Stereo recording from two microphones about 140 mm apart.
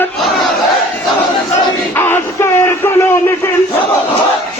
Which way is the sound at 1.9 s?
15° left (ahead or behind).